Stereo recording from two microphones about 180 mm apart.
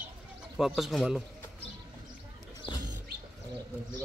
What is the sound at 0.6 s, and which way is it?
Speech, centre (ahead or behind).